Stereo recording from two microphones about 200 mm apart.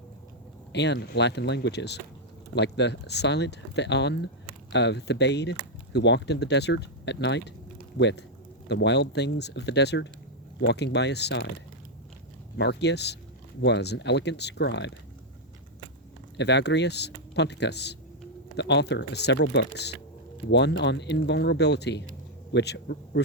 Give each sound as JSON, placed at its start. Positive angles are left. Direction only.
{"t": 0.7, "sound": "speech", "side_deg": 60}
{"t": 12.5, "sound": "speech", "side_deg": 60}
{"t": 16.4, "sound": "speech", "side_deg": 60}